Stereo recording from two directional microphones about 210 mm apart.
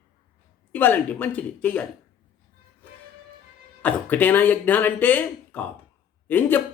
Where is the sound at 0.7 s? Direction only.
10° left (ahead or behind).